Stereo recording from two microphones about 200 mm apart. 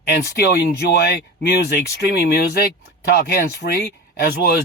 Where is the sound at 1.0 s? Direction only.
55° left (ahead or behind).